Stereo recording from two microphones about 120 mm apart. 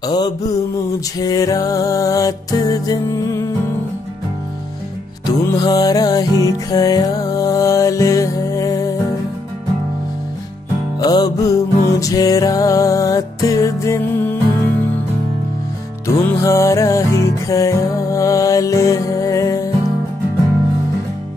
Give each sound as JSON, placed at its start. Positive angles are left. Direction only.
{"t": 0.0, "sound": "mantra", "side_deg": 35}
{"t": 1.2, "sound": "music", "side_deg": 30}
{"t": 5.2, "sound": "music", "side_deg": 30}
{"t": 11.0, "sound": "music", "side_deg": 35}
{"t": 16.2, "sound": "music", "side_deg": 25}